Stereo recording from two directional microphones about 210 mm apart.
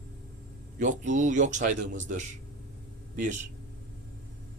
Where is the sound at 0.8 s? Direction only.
35° right (ahead or behind).